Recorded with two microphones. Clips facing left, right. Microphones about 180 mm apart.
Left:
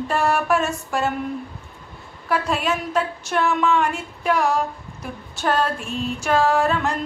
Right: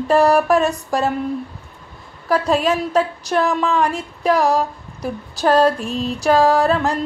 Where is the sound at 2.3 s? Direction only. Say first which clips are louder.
Right 5 dB; 35° right (ahead or behind).